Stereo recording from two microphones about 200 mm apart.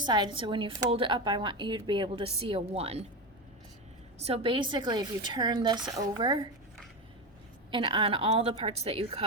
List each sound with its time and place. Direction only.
0.0 s a woman's voice: 20° right (ahead or behind)
4.2 s a woman's voice: 30° right (ahead or behind)
7.7 s a woman's voice: 25° right (ahead or behind)